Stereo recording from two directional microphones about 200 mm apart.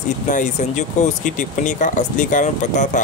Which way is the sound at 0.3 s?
40° left (ahead or behind).